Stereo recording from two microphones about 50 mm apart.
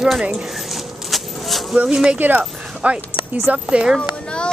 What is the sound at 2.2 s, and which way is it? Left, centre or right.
Speech, right.